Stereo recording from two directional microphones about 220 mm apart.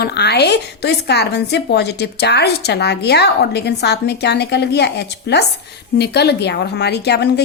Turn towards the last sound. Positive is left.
turn(degrees=50)  # may be behind; listen again after turning